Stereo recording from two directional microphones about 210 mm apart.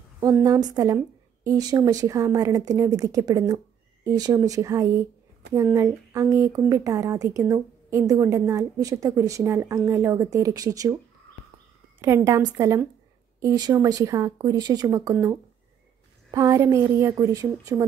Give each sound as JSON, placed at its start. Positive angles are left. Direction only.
{"t": 0.2, "sound": "a woman's voice", "side_deg": -15}
{"t": 12.0, "sound": "a woman's voice", "side_deg": -15}